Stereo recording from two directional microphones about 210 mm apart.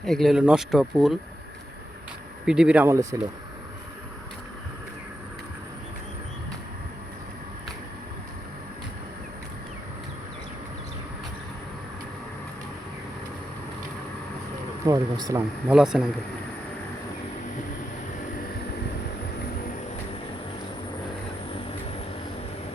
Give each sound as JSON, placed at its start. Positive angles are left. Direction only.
{"t": 0.0, "sound": "speech", "side_deg": 0}
{"t": 2.5, "sound": "speech", "side_deg": -5}
{"t": 14.8, "sound": "speech", "side_deg": -15}
{"t": 15.7, "sound": "speech", "side_deg": -5}